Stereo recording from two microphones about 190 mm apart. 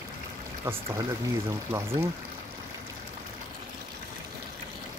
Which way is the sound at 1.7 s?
15° right (ahead or behind).